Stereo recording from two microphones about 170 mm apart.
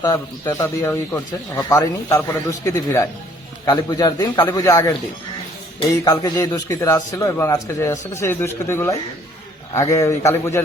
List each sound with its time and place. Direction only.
0.0 s a man's voice: 20° left (ahead or behind)
5.9 s speech: 25° left (ahead or behind)